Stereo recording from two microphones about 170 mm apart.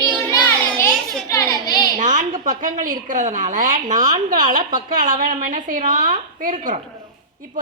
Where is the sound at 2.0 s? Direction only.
45° right (ahead or behind).